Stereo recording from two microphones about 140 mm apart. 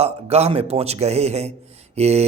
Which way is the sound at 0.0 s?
50° right (ahead or behind).